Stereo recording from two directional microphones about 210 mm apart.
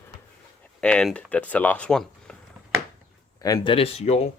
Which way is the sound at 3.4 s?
20° left (ahead or behind).